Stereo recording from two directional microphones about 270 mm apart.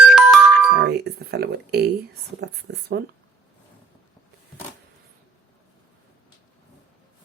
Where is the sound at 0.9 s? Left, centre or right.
Right.